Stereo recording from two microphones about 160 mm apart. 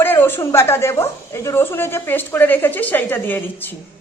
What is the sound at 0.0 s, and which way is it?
A woman's voice, 15° left (ahead or behind).